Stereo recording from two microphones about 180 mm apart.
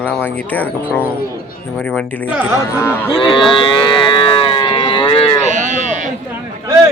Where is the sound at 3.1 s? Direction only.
30° left (ahead or behind).